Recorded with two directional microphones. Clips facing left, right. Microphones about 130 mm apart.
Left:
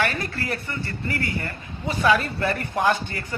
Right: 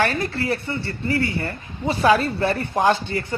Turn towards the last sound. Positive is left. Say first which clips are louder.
# right 3 dB
turn(degrees=-25)  # may be behind; listen again after turning